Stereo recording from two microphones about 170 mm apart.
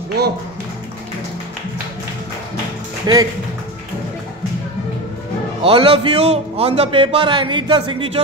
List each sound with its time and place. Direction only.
3.1 s speech: 25° right (ahead or behind)
5.6 s a man's voice: 30° right (ahead or behind)